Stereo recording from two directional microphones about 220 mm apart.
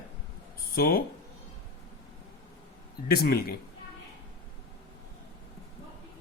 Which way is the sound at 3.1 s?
45° left (ahead or behind).